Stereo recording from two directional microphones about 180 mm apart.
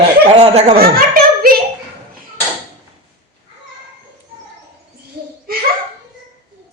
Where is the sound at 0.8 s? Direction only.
55° right (ahead or behind).